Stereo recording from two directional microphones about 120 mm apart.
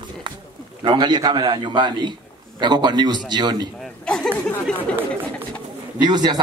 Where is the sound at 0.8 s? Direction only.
40° right (ahead or behind).